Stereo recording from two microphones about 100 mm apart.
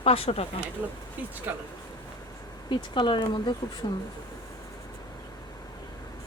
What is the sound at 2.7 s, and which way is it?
Speech, 55° left (ahead or behind).